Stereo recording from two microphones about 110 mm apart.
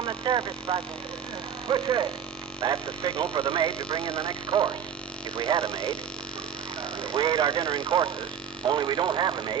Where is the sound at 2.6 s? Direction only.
30° right (ahead or behind).